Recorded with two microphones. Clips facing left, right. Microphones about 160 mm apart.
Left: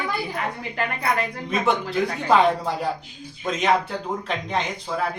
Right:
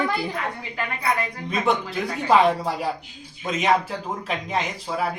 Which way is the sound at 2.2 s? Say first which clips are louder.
Right 1 dB; centre (ahead or behind).